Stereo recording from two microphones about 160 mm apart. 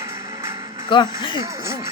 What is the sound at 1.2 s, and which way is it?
Speech, 30° left (ahead or behind).